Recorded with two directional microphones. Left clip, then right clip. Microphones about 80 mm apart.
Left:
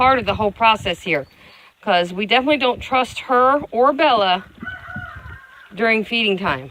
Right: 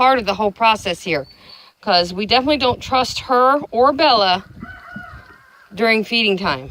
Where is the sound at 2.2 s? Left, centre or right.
Right.